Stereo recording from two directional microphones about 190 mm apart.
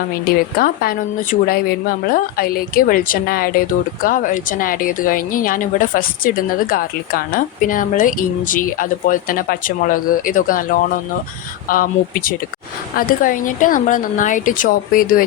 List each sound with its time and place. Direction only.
0.6 s a woman's voice: 50° left (ahead or behind)